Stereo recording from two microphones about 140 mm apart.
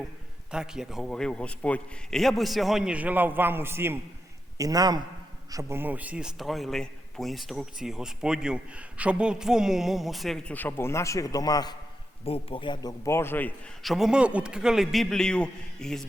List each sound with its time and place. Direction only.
0.5 s a man's voice: 5° right (ahead or behind); by 11.8 s 30° left (ahead or behind)
12.2 s speech: 45° left (ahead or behind)
13.1 s a man's voice: 15° left (ahead or behind)
13.8 s a man's voice: centre (ahead or behind)